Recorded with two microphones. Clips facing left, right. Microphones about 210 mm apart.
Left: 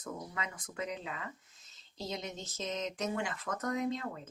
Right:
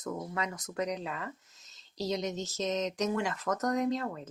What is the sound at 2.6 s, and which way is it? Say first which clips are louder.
Speech: right 5 dB; 40° right (ahead or behind).